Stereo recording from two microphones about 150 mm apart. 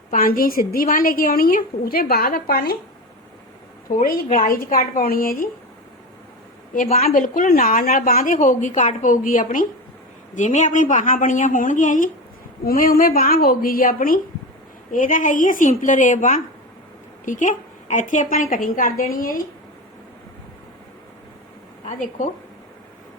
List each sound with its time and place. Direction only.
0.1 s a woman's voice: 75° left (ahead or behind); by 2.7 s 90° left
3.8 s a woman's voice: 70° left (ahead or behind)
7.1 s a woman's voice: 60° left (ahead or behind)
12.6 s a woman's voice: 75° left (ahead or behind)
21.8 s a woman's voice: 50° left (ahead or behind)